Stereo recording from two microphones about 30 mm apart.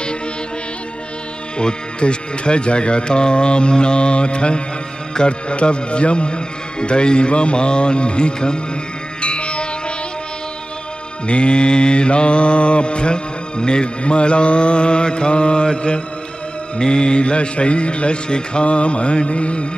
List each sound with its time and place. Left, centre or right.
1.6 s mantra: left
9.2 s music: left
11.2 s mantra: left